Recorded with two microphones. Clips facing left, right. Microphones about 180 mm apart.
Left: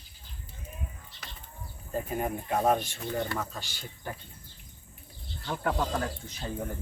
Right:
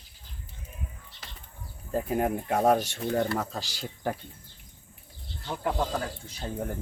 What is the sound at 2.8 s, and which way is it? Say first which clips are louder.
Speech: right 5 dB; 80° right.